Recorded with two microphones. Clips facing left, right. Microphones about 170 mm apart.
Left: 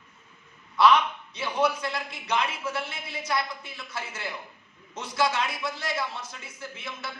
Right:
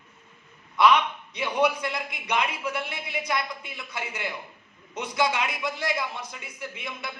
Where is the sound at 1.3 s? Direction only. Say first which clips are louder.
Right 2 dB; 15° right (ahead or behind).